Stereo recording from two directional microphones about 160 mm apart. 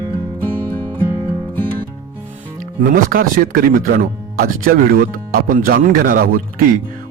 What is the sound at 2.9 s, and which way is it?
Speech, 60° right (ahead or behind).